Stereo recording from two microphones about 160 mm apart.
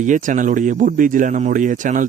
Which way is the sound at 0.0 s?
50° right (ahead or behind).